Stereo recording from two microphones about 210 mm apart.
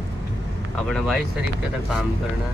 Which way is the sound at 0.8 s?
5° left (ahead or behind).